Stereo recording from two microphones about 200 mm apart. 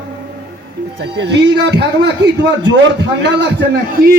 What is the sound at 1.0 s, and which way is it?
A man's voice, 60° right (ahead or behind).